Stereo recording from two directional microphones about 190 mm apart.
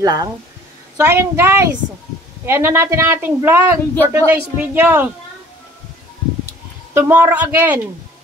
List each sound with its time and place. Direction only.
0.0 s a woman's voice: 20° right (ahead or behind)
6.9 s a woman's voice: 10° right (ahead or behind)